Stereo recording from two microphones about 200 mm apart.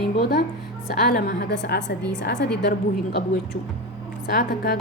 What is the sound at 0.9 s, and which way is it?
A woman's voice, 50° left (ahead or behind).